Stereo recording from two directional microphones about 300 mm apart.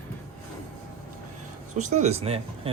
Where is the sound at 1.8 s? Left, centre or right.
Right.